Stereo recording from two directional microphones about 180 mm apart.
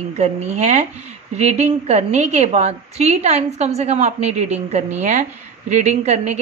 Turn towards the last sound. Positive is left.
turn(degrees=-40)  # may be behind; listen again after turning